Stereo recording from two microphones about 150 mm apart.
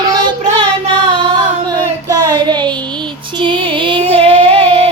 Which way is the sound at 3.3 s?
35° right (ahead or behind).